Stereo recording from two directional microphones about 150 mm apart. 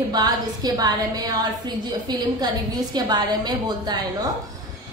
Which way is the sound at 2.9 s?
25° right (ahead or behind).